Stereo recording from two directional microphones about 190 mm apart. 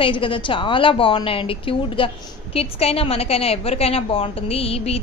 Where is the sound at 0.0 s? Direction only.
25° left (ahead or behind).